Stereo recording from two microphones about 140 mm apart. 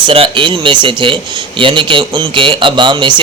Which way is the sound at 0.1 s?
40° right (ahead or behind).